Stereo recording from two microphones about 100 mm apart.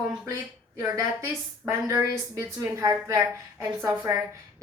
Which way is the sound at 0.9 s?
30° right (ahead or behind).